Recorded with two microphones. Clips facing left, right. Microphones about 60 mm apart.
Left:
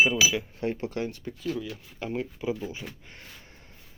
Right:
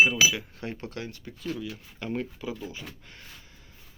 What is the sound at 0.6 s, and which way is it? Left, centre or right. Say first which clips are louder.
Speech: left 6 dB; left.